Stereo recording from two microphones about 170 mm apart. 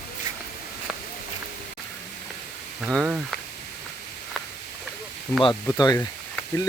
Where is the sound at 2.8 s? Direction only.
5° right (ahead or behind).